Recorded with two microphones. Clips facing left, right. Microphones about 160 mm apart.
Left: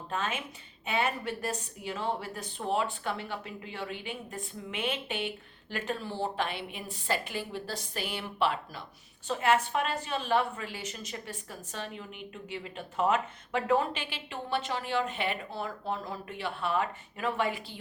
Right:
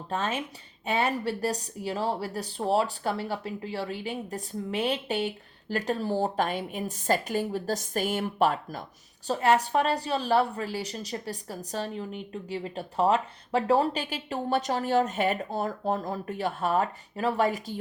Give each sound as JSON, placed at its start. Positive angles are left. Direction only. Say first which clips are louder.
{"t": 0.1, "sound": "a woman's voice", "louder": "right 4 dB", "side_deg": -35}